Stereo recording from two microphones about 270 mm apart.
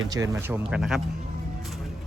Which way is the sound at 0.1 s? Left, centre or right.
Centre.